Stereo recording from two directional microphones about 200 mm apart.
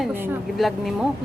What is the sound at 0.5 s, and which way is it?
Speech, centre (ahead or behind).